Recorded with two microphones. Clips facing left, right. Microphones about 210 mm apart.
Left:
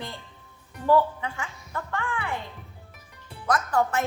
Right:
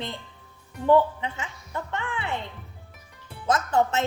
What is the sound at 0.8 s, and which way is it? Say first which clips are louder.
Speech: right 2 dB; 20° right (ahead or behind).